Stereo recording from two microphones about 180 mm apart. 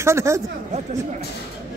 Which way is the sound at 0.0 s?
15° right (ahead or behind).